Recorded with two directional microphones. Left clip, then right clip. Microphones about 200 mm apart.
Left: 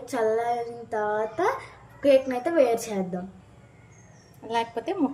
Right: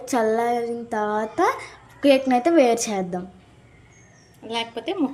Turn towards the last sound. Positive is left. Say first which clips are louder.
# right 2 dB
turn(degrees=0)  # may be behind; listen again after turning